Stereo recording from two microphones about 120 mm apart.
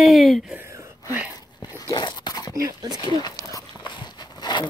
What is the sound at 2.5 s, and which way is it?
Speech, 30° right (ahead or behind).